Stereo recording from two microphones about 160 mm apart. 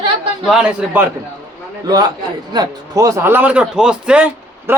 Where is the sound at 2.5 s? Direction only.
25° right (ahead or behind).